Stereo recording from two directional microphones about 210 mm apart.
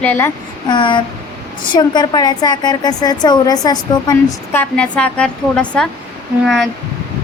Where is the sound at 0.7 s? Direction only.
20° left (ahead or behind).